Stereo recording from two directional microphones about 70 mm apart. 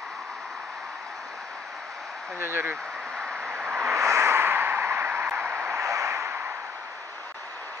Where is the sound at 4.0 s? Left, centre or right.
Right.